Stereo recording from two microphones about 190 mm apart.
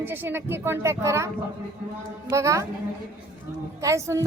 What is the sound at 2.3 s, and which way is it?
Speech, 15° right (ahead or behind).